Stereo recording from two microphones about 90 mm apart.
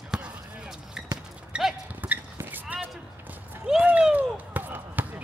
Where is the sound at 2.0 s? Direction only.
20° right (ahead or behind).